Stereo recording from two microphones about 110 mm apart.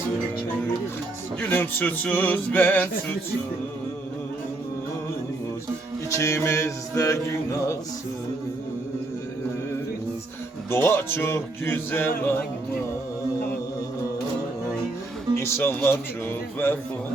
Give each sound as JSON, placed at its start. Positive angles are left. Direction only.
{"t": 1.4, "sound": "music", "side_deg": 15}
{"t": 6.1, "sound": "music", "side_deg": 25}
{"t": 10.7, "sound": "music", "side_deg": 20}
{"t": 15.4, "sound": "music", "side_deg": 20}